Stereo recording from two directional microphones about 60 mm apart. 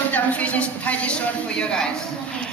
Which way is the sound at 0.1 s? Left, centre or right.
Left.